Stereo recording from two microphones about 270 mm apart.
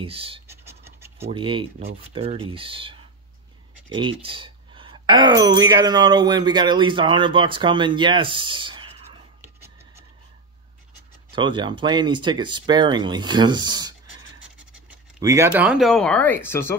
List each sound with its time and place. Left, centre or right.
0.0 s scratch: right
1.2 s speech: centre
11.3 s speech: centre
14.6 s scratch: centre
15.1 s speech: centre